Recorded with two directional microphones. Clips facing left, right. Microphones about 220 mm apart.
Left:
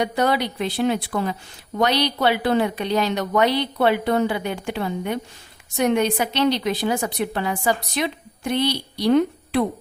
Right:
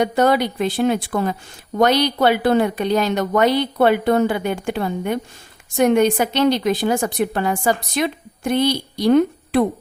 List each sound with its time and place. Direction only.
0.0 s a woman's voice: 50° right (ahead or behind)